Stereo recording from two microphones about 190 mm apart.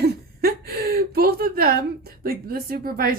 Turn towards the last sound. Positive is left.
turn(degrees=-50)  # may be behind; listen again after turning